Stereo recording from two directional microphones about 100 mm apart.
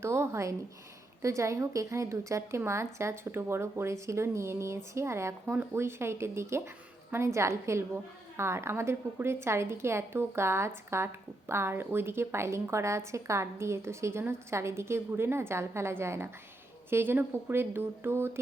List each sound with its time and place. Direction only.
0.0 s a woman's voice: 25° right (ahead or behind)